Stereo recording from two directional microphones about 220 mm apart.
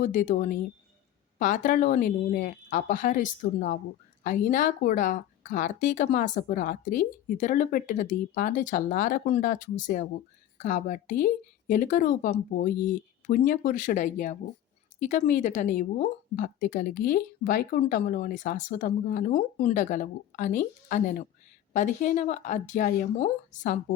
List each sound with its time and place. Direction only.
0.0 s speech: 35° left (ahead or behind)